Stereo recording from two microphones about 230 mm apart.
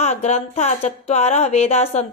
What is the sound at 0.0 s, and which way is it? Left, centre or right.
Speech, left.